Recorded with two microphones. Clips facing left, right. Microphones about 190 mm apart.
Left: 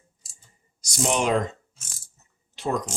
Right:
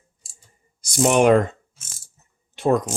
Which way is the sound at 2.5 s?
55° right (ahead or behind).